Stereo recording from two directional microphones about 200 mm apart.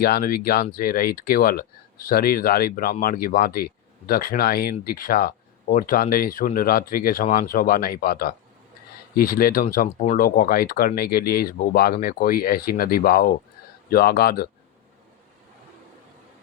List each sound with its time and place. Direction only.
0.0 s speech: 50° left (ahead or behind)